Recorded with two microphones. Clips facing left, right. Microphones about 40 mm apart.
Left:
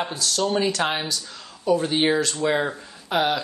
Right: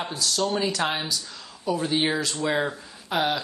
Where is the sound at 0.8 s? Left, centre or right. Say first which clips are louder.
Left 2 dB; centre.